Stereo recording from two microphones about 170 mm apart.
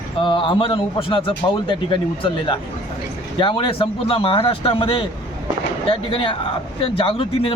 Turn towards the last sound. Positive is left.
turn(degrees=30)  # may be behind; listen again after turning